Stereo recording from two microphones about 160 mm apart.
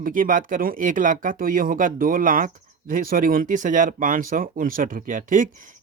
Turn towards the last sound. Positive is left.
turn(degrees=-55)  # may be behind; listen again after turning